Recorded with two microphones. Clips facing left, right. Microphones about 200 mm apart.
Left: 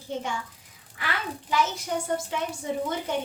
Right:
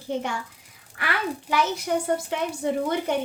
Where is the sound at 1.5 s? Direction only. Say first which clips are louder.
Right 2 dB; 65° right (ahead or behind).